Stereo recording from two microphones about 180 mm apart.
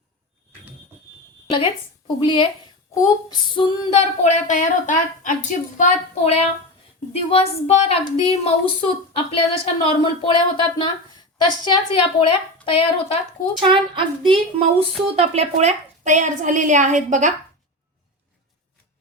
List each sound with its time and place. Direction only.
2.1 s a woman's voice: 25° left (ahead or behind)
2.9 s child singing: 20° left (ahead or behind)
11.4 s a woman's voice: 25° left (ahead or behind)
12.6 s child singing: 30° left (ahead or behind)
13.6 s a woman's voice: 25° right (ahead or behind); by 17.3 s 45° right (ahead or behind)